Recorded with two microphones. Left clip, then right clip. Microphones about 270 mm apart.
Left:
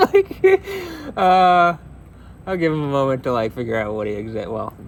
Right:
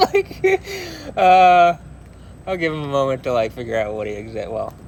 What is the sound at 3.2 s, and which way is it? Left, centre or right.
Speech, left.